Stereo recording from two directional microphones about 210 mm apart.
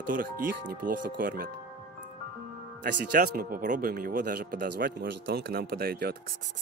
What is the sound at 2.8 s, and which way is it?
Speech, 45° right (ahead or behind).